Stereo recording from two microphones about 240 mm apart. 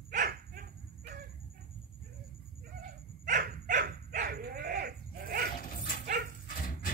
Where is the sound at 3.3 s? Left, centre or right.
Right.